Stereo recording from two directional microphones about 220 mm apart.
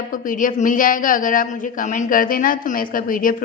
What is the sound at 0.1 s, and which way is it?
A woman's voice, 35° left (ahead or behind).